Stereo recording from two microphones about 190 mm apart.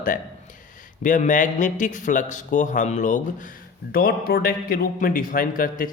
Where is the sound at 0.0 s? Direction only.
45° left (ahead or behind).